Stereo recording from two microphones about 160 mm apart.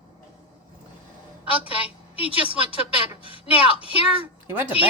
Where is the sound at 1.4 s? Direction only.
35° left (ahead or behind).